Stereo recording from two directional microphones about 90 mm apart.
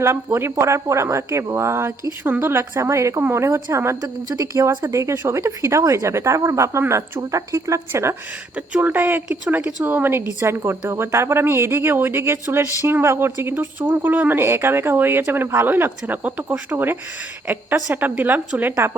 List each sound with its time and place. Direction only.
0.0 s a woman's voice: 30° right (ahead or behind)
5.1 s speech: 20° right (ahead or behind)
5.4 s a woman's voice: 35° right (ahead or behind)
8.5 s speech: 15° right (ahead or behind)